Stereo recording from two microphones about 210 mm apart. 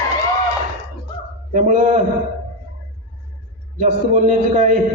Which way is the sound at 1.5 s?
35° right (ahead or behind).